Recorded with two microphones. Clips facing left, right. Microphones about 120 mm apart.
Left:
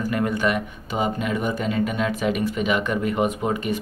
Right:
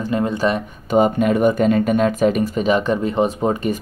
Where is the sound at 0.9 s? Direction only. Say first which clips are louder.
Right 9 dB; 50° right (ahead or behind).